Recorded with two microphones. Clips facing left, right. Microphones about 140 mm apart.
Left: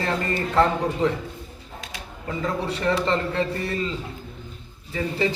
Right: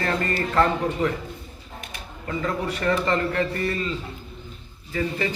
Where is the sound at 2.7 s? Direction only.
20° left (ahead or behind).